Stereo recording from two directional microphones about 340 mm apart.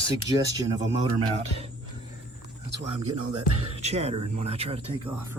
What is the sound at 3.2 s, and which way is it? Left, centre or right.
Music, right.